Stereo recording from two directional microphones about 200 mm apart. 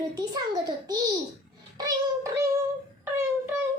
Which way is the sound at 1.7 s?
20° right (ahead or behind).